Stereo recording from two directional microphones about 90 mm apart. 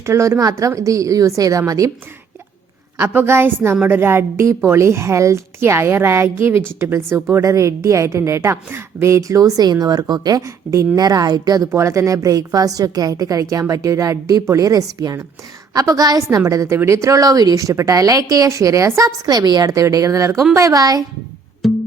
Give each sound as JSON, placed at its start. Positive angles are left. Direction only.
{"t": 0.0, "sound": "a woman's voice", "side_deg": -30}
{"t": 3.0, "sound": "a woman's voice", "side_deg": -25}
{"t": 11.7, "sound": "a woman's voice", "side_deg": -30}
{"t": 21.6, "sound": "music", "side_deg": 0}